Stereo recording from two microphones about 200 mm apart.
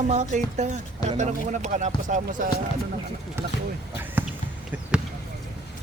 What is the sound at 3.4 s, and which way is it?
Speech, 10° right (ahead or behind).